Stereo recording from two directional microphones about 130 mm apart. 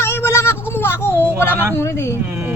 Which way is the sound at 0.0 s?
20° left (ahead or behind).